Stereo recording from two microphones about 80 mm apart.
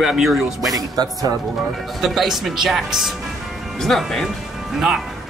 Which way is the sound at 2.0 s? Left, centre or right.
Centre.